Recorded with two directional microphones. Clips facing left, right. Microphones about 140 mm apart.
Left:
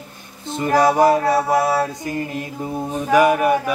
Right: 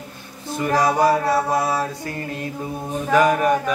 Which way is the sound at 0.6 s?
20° left (ahead or behind).